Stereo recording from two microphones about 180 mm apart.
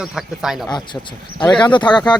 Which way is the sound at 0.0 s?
5° right (ahead or behind).